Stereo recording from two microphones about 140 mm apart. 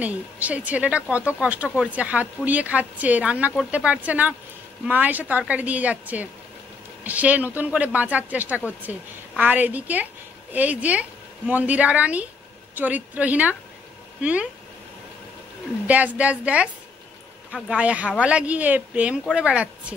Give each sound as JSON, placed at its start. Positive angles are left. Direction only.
{"t": 0.0, "sound": "speech", "side_deg": -10}
{"t": 15.9, "sound": "speech", "side_deg": -10}